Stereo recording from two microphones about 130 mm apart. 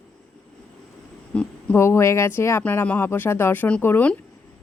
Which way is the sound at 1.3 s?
10° left (ahead or behind).